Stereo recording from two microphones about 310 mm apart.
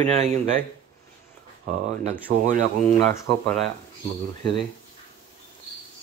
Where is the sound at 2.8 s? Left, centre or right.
Centre.